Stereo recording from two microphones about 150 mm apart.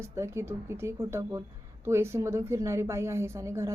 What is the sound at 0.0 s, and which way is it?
A woman's voice, 20° right (ahead or behind).